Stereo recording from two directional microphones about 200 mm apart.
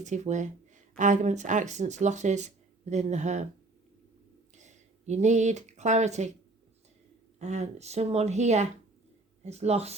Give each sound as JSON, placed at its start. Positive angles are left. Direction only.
{"t": 0.0, "sound": "speech", "side_deg": -35}
{"t": 4.5, "sound": "speech", "side_deg": -35}
{"t": 7.3, "sound": "speech", "side_deg": -35}